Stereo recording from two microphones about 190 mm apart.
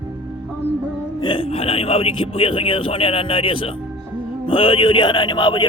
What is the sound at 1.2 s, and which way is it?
A man's voice, 30° left (ahead or behind).